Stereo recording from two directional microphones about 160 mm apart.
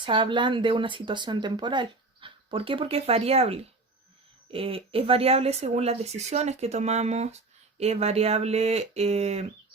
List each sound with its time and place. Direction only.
0.0 s speech: 30° right (ahead or behind)